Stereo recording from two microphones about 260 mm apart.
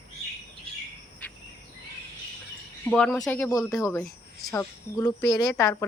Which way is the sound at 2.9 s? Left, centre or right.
Centre.